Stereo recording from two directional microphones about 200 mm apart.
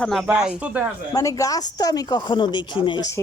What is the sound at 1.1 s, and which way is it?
Speech, 15° left (ahead or behind).